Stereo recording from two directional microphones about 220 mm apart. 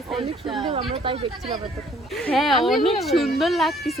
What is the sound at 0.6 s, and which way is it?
Speech, 25° right (ahead or behind).